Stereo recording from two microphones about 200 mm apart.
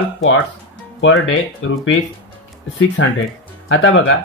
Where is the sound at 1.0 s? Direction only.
85° left.